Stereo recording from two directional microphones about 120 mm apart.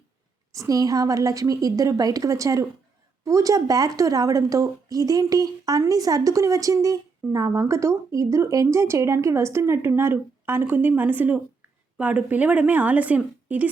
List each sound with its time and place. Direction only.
0.5 s a woman's voice: 30° right (ahead or behind); by 13.7 s 10° right (ahead or behind)